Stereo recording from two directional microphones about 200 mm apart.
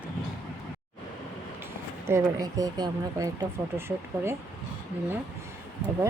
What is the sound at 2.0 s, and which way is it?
Speech, 15° right (ahead or behind).